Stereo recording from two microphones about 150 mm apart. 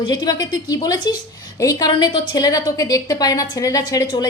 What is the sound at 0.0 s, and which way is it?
A woman's voice, 25° left (ahead or behind).